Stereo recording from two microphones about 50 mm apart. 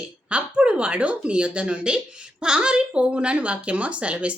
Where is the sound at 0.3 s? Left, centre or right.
Right.